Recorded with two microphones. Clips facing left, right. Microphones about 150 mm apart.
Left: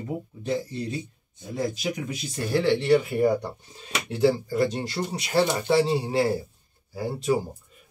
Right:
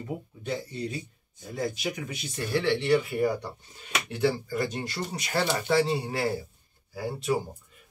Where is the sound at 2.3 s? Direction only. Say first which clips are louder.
Left 4 dB; 40° left (ahead or behind).